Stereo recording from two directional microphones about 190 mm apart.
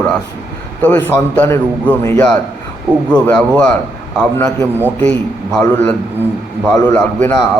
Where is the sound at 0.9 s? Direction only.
10° left (ahead or behind).